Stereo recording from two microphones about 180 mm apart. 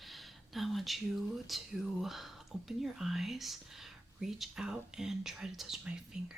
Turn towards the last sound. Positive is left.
turn(degrees=-5)  # may be behind; listen again after turning